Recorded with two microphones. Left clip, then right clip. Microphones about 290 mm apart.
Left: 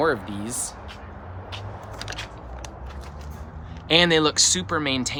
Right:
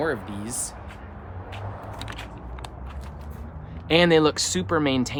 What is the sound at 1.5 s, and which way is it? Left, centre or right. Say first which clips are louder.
Vehicle: even; centre.